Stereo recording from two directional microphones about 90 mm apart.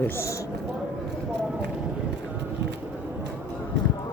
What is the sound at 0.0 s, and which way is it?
Speech, 30° left (ahead or behind).